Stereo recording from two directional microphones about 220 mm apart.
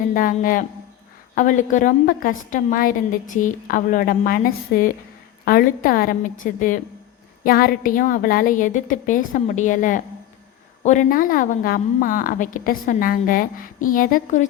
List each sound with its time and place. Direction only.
0.1 s a woman's voice: 40° left (ahead or behind)